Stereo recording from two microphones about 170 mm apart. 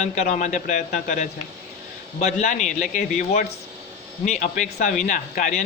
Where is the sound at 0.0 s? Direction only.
45° left (ahead or behind).